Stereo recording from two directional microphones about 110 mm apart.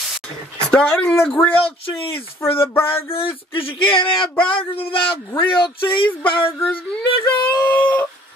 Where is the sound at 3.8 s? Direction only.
50° left (ahead or behind).